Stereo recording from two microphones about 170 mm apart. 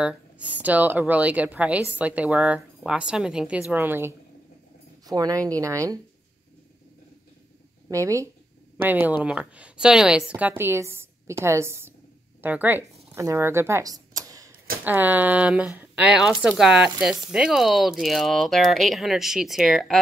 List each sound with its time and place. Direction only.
0.0 s a woman's voice: 5° right (ahead or behind)
7.9 s a woman's voice: 15° right (ahead or behind); by 20.0 s centre (ahead or behind)